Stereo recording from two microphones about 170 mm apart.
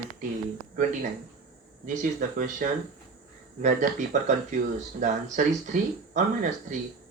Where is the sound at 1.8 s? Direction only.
45° right (ahead or behind).